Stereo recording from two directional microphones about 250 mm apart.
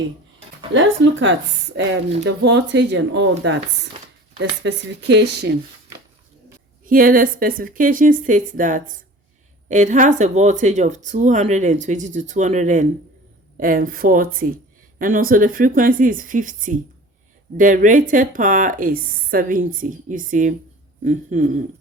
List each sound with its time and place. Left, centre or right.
0.7 s speech: right
6.8 s a woman's voice: right